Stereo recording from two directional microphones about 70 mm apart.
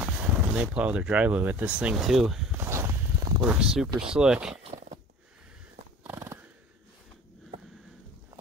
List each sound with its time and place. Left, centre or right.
0.0 s speech: centre
2.0 s speech: centre
2.5 s walk: right
3.4 s speech: centre
6.0 s a sound: right